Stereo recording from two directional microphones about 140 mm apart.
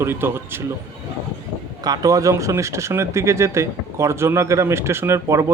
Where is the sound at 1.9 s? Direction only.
25° right (ahead or behind).